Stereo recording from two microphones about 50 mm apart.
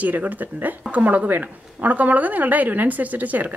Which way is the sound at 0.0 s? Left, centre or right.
Right.